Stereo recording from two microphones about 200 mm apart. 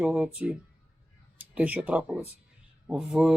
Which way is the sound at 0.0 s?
5° right (ahead or behind).